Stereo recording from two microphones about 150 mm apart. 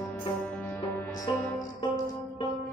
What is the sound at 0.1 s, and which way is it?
Music, 15° left (ahead or behind).